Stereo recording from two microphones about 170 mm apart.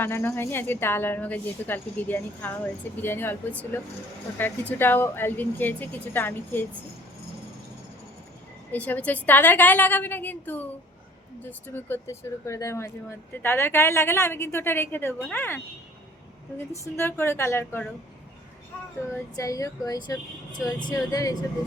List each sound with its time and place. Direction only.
0.0 s speech: 15° left (ahead or behind)
8.7 s speech: 10° left (ahead or behind)
11.7 s speech: 15° left (ahead or behind)
16.7 s speech: 15° left (ahead or behind)
19.1 s speech: 20° left (ahead or behind)